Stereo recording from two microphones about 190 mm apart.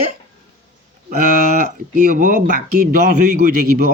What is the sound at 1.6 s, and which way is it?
A man's voice, 45° right (ahead or behind).